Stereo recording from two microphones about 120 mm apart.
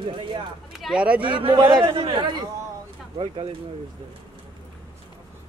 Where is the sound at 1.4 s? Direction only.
40° right (ahead or behind).